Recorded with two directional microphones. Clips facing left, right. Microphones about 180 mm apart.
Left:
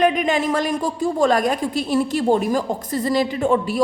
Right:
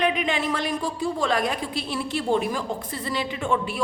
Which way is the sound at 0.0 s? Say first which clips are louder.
Left 6 dB; 45° left (ahead or behind).